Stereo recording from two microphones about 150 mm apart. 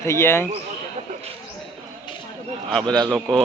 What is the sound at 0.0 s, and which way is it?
Speech, 20° left (ahead or behind).